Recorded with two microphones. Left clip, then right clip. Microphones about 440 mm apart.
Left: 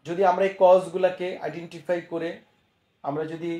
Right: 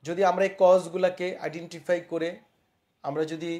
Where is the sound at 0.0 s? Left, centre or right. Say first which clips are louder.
Left 2 dB; right.